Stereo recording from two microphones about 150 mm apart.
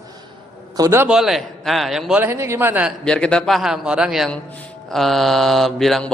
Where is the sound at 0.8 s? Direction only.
20° right (ahead or behind).